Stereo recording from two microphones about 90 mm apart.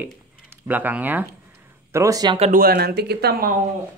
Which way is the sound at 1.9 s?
35° right (ahead or behind).